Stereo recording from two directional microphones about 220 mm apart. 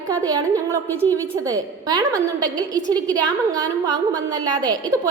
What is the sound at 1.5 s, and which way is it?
A woman's voice, 15° right (ahead or behind).